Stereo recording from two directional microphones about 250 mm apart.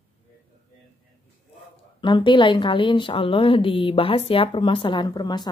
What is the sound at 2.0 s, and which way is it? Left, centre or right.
A woman's voice, centre.